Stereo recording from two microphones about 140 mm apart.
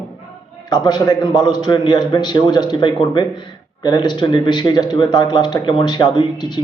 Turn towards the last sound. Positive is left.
turn(degrees=30)  # may be behind; listen again after turning